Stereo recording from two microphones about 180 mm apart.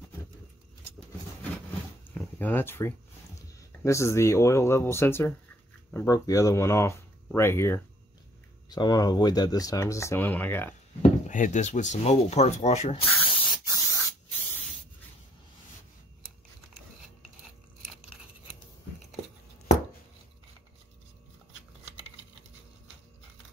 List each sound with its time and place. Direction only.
2.1 s a sound: 10° left (ahead or behind)
3.3 s speech: 15° left (ahead or behind)
11.0 s speech: 45° left (ahead or behind)
13.2 s spray: 20° left (ahead or behind)